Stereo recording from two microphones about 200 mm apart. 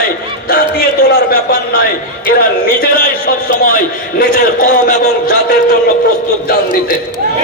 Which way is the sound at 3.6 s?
50° left (ahead or behind).